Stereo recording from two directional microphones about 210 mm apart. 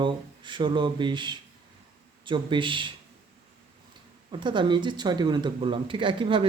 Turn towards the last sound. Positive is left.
turn(degrees=-25)  # may be behind; listen again after turning